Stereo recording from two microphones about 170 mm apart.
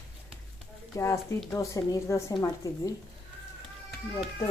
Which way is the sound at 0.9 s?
15° left (ahead or behind).